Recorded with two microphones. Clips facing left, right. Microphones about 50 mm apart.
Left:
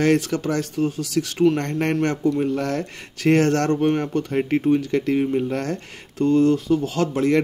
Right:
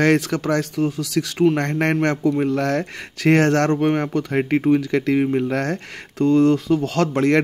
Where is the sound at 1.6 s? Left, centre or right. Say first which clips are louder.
Right 2 dB; right.